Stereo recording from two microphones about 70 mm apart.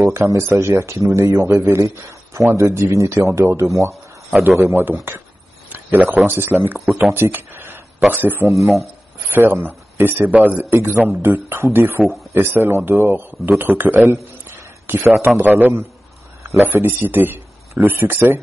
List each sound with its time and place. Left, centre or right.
0.0 s speech: right
5.7 s speech: right
7.2 s a sound: right
8.1 s speech: right
8.5 s speech: centre
9.3 s speech: right
12.0 s speech: centre
12.4 s a man's voice: right